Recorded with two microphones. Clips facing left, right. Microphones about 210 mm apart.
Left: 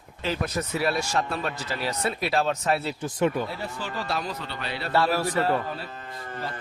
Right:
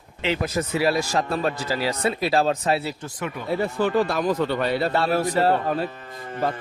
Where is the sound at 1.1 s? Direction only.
35° right (ahead or behind).